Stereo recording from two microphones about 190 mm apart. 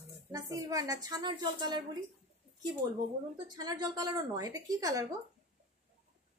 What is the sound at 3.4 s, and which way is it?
A woman's voice, 20° right (ahead or behind).